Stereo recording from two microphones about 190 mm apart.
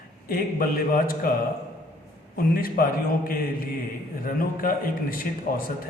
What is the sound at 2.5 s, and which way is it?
Speech, 50° left (ahead or behind).